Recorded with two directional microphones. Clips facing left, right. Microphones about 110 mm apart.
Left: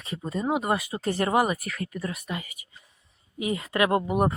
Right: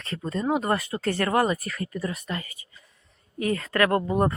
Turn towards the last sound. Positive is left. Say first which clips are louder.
# right 1 dB
turn(degrees=15)  # may be behind; listen again after turning